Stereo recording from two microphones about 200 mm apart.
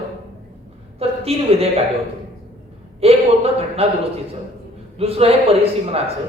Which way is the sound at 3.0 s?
30° right (ahead or behind).